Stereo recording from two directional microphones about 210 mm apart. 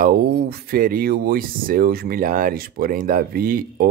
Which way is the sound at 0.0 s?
50° right (ahead or behind).